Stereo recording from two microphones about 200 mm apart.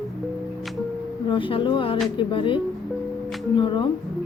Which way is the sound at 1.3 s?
25° left (ahead or behind).